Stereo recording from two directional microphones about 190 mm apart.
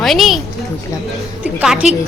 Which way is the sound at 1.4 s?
5° right (ahead or behind).